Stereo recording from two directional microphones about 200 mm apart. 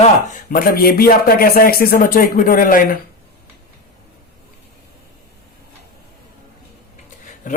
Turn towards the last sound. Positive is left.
turn(degrees=40)  # may be behind; listen again after turning